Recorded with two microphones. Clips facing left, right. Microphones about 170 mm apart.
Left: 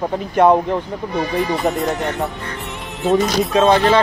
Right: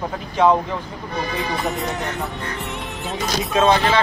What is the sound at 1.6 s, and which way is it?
Speech, centre (ahead or behind).